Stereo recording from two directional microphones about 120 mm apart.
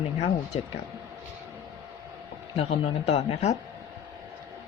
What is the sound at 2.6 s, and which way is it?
Speech, 60° left (ahead or behind).